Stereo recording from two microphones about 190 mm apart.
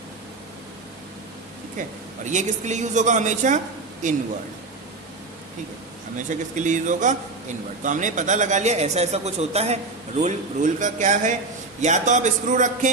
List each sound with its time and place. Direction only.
2.2 s a man's voice: 40° right (ahead or behind)
6.1 s a man's voice: 40° right (ahead or behind)